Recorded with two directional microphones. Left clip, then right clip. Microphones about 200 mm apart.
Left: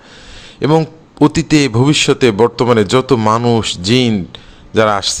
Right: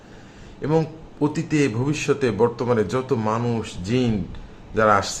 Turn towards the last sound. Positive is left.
turn(degrees=35)  # may be behind; listen again after turning